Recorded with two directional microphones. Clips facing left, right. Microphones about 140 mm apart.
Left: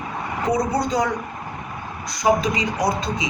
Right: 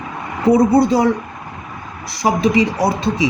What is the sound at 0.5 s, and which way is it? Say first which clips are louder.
Speech: right 9 dB; 30° right (ahead or behind).